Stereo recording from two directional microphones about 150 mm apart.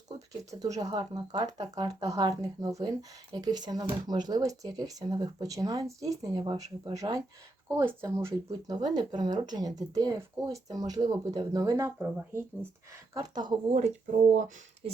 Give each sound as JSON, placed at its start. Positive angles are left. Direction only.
{"t": 0.6, "sound": "speech", "side_deg": -25}
{"t": 13.1, "sound": "speech", "side_deg": -30}
{"t": 13.7, "sound": "speech", "side_deg": -50}